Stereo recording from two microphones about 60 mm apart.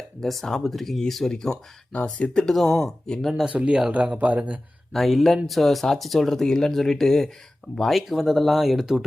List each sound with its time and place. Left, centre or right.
0.2 s speech: centre
3.4 s speech: centre
4.9 s speech: centre